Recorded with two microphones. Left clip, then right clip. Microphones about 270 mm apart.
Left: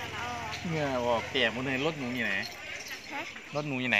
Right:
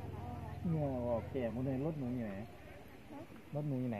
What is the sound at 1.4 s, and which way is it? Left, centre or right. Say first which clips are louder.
Speech: left 11 dB; left.